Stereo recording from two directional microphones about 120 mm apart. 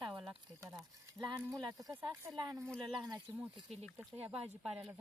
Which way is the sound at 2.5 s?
25° right (ahead or behind).